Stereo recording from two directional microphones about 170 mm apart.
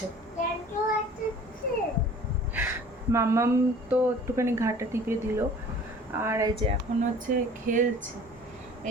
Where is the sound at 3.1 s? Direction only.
15° right (ahead or behind).